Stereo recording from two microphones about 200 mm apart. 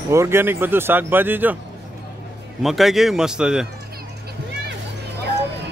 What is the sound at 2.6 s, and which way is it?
A man's voice, centre (ahead or behind).